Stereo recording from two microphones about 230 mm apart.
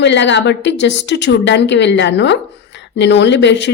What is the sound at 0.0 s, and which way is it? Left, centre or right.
A woman's voice, left.